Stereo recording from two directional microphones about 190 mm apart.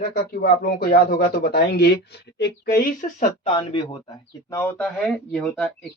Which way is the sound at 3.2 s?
30° left (ahead or behind).